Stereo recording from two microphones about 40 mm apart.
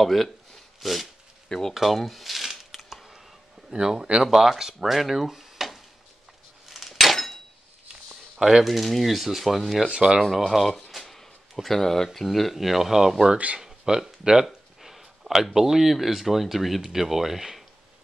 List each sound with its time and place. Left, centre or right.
0.0 s speech: centre
1.7 s a sound: centre
3.7 s speech: centre
5.3 s a sound: centre
6.7 s a sound: centre
8.4 s speech: centre
8.6 s speech: centre
9.8 s speech: right
10.3 s speech: centre
10.9 s a sound: centre
11.5 s speech: centre
14.4 s speech: centre